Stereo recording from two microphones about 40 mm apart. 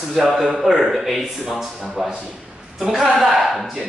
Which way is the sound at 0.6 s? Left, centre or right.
Centre.